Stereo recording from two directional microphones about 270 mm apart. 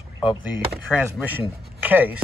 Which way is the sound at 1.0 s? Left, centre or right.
Centre.